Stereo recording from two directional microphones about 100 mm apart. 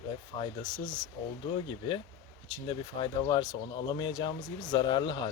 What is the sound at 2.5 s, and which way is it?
Speech, 50° left (ahead or behind).